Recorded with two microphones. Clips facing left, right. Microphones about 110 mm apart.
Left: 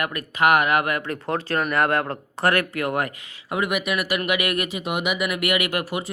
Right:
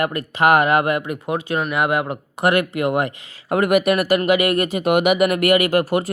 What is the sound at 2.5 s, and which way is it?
Speech, 20° right (ahead or behind).